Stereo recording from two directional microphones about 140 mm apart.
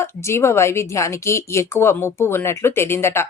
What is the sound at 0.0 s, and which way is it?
Speech, 20° left (ahead or behind).